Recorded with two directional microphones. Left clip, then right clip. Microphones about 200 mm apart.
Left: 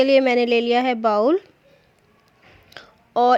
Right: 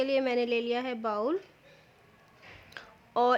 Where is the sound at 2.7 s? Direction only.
20° left (ahead or behind).